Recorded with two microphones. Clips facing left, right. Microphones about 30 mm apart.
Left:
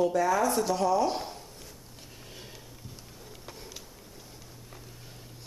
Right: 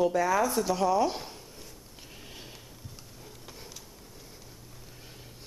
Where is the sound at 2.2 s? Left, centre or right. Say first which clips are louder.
Even; centre.